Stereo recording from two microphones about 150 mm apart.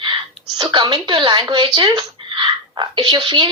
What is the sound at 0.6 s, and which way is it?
Speech, 30° right (ahead or behind).